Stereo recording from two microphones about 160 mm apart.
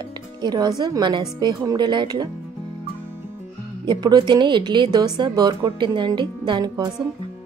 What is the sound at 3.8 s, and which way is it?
Speech, 25° right (ahead or behind).